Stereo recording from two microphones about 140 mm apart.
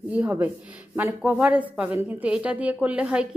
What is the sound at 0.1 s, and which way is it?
A woman's voice, 10° right (ahead or behind).